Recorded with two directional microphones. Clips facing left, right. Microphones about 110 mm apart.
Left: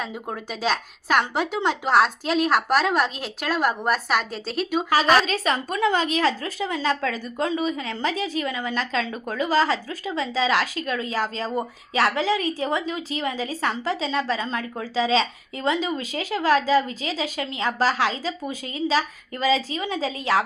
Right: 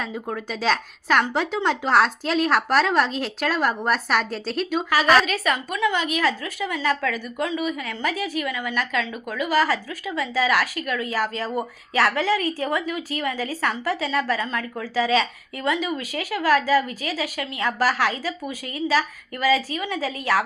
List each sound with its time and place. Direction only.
0.0 s a woman's voice: 5° left (ahead or behind)
4.9 s a woman's voice: 25° left (ahead or behind)